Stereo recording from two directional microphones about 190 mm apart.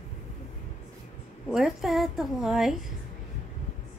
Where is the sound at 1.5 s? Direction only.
Centre (ahead or behind).